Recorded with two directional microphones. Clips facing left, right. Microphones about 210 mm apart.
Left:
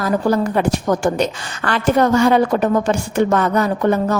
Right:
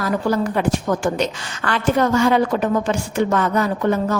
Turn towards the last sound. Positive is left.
turn(degrees=40)  # may be behind; listen again after turning